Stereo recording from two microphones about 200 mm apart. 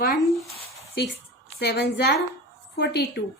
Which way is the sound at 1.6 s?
55° left (ahead or behind).